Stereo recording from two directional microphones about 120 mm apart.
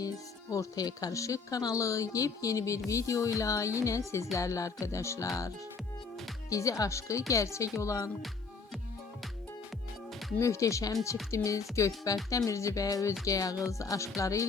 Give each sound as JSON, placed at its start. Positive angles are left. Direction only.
{"t": 0.5, "sound": "speech", "side_deg": 30}
{"t": 6.5, "sound": "speech", "side_deg": 30}
{"t": 10.4, "sound": "speech", "side_deg": 25}